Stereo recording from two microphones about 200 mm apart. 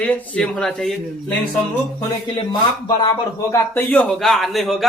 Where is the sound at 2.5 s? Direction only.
20° left (ahead or behind).